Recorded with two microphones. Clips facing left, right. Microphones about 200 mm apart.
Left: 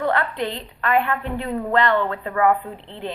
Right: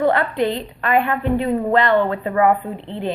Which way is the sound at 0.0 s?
15° right (ahead or behind).